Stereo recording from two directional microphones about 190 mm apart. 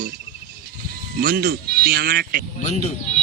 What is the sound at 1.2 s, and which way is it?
Speech, 55° right (ahead or behind).